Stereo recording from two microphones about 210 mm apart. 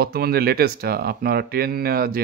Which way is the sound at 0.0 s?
50° right (ahead or behind).